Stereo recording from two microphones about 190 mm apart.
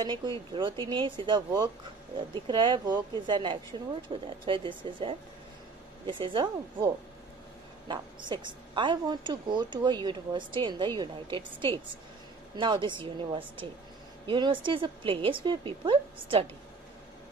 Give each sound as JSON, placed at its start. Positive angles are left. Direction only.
{"t": 0.0, "sound": "a woman's voice", "side_deg": -25}
{"t": 7.9, "sound": "a woman's voice", "side_deg": -25}
{"t": 12.5, "sound": "a woman's voice", "side_deg": -25}